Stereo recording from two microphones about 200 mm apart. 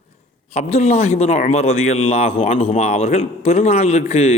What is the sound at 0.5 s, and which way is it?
A man's voice, 35° left (ahead or behind).